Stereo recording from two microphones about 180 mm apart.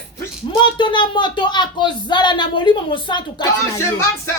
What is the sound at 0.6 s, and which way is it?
Speech, 25° left (ahead or behind).